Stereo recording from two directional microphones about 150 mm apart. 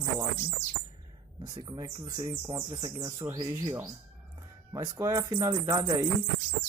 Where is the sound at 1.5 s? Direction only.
25° right (ahead or behind).